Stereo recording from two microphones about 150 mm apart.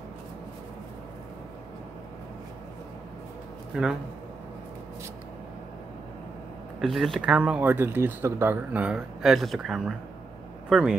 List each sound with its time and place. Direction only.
6.8 s speech: centre (ahead or behind)